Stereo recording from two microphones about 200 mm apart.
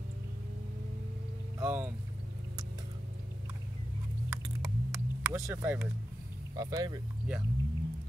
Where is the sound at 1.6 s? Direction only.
10° right (ahead or behind).